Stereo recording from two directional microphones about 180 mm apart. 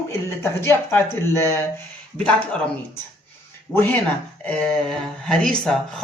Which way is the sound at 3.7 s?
10° left (ahead or behind).